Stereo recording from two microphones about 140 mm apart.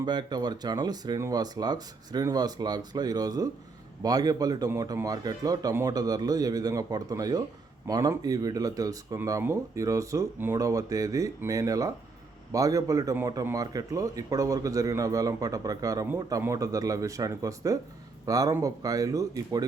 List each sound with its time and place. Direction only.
0.0 s speech: 30° right (ahead or behind)